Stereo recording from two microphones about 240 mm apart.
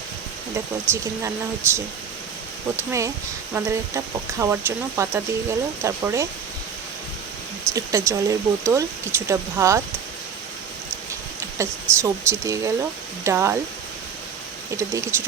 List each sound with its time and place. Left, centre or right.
0.9 s speech: centre
7.7 s speech: centre
11.5 s speech: centre
14.8 s speech: centre